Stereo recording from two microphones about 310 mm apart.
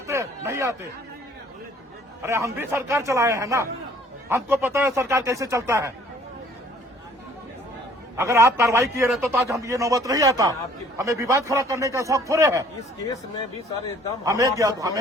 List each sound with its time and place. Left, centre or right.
0.1 s a sound: centre
2.2 s a man's voice: centre
8.1 s a man's voice: centre
14.3 s a man's voice: centre